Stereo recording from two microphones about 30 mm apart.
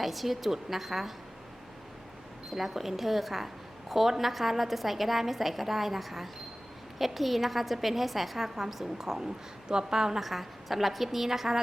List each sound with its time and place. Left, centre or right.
0.0 s a woman's voice: centre
2.5 s a woman's voice: centre
10.2 s a woman's voice: centre